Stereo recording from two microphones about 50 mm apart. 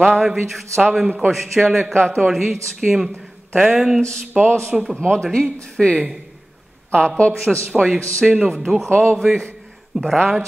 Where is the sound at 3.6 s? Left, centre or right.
Centre.